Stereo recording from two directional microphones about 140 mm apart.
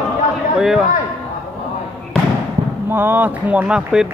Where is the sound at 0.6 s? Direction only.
5° right (ahead or behind).